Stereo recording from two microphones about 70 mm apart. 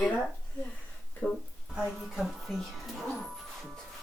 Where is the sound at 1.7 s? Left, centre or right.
Centre.